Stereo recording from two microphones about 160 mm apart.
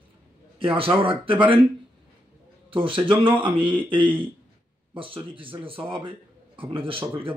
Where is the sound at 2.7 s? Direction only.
30° right (ahead or behind).